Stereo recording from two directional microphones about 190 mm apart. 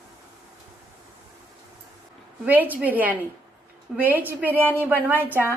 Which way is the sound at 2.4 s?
10° right (ahead or behind).